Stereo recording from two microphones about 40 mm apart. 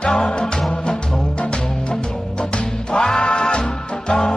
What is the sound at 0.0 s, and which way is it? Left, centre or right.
Music, left.